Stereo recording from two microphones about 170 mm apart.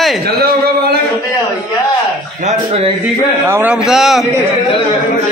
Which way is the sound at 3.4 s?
10° right (ahead or behind).